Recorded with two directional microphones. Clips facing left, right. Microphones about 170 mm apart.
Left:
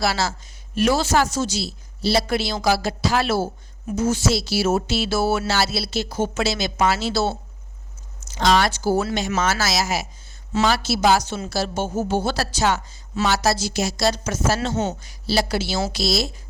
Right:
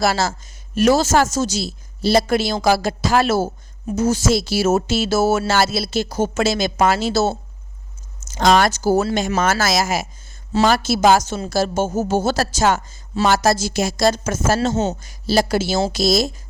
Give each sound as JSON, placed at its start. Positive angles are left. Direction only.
{"t": 0.0, "sound": "speech", "side_deg": -45}